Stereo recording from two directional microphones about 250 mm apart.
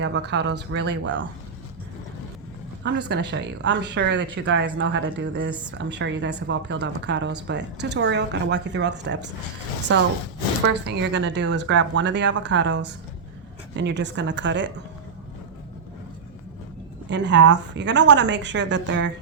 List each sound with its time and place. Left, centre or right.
0.0 s a woman's voice: right
2.8 s a woman's voice: right
10.8 s a woman's voice: right
17.1 s a woman's voice: right